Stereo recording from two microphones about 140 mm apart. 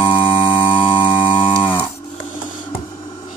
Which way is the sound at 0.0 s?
35° left (ahead or behind).